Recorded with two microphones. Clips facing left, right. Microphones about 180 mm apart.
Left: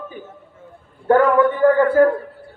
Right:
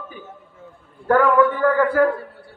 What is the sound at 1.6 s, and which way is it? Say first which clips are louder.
Speech: left 5 dB; 25° left (ahead or behind).